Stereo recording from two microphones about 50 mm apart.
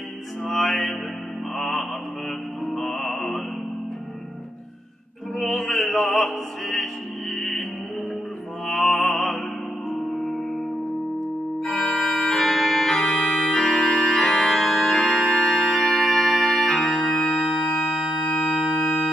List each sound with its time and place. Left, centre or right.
0.5 s music: centre
5.4 s opera: centre
8.6 s music: centre
9.8 s music: left
11.7 s organ: centre
16.8 s organ: centre